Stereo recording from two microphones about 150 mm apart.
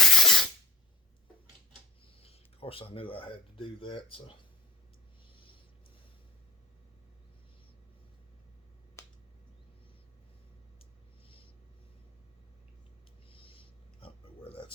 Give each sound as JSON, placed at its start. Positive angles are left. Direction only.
{"t": 0.0, "sound": "spray", "side_deg": 0}
{"t": 2.2, "sound": "speech", "side_deg": 40}
{"t": 13.3, "sound": "a sound", "side_deg": 35}